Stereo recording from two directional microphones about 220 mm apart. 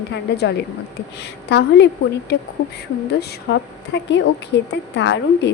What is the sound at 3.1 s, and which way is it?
A woman's voice, 50° left (ahead or behind).